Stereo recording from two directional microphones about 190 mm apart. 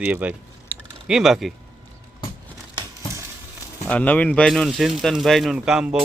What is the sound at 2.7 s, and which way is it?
Crumpling, 15° right (ahead or behind).